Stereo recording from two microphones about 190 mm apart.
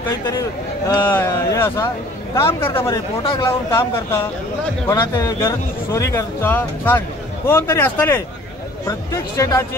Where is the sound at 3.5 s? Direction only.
15° left (ahead or behind).